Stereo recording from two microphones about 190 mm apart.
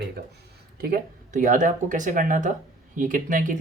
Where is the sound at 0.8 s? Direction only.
50° right (ahead or behind).